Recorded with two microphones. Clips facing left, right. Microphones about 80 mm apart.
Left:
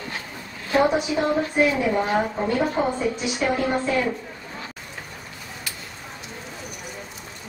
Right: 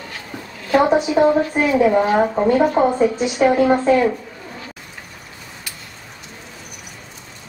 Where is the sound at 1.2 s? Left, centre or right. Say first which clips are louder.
Right 12 dB; right.